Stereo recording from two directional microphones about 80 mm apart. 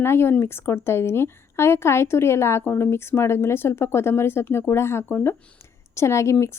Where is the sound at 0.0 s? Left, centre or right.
Left.